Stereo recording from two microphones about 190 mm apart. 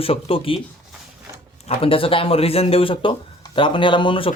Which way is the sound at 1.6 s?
30° left (ahead or behind).